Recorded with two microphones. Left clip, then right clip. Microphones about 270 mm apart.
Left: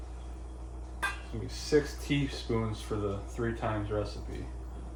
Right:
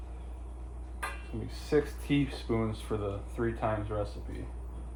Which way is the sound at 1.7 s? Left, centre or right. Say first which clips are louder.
Left 1 dB; centre.